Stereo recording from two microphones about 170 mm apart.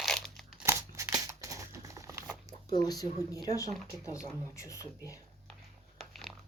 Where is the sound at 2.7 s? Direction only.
25° left (ahead or behind).